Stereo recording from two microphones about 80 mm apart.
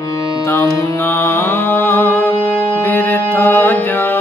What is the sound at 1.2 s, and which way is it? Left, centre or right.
Music, left.